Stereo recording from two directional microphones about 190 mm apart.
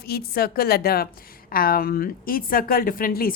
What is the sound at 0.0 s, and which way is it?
A woman's voice, 55° left (ahead or behind).